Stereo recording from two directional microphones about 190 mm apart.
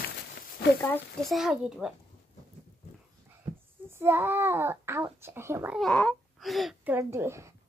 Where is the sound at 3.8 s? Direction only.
15° right (ahead or behind).